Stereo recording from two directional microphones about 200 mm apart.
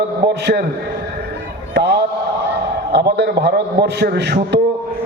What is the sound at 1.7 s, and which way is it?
A man's voice, 55° right (ahead or behind).